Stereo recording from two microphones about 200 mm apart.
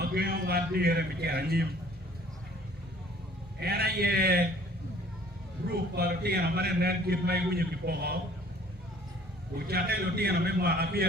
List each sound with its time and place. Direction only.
0.0 s a man's voice: 50° right (ahead or behind)
3.6 s a man's voice: 50° right (ahead or behind)
5.7 s a man's voice: 50° right (ahead or behind)
9.6 s a man's voice: 50° right (ahead or behind)